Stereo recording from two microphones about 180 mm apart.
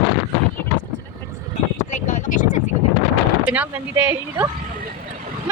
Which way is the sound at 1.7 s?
40° left (ahead or behind).